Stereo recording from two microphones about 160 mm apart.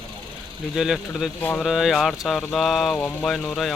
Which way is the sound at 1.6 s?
Centre (ahead or behind).